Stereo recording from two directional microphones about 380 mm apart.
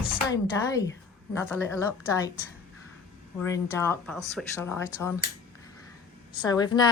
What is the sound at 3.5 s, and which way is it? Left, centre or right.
A woman's voice, centre.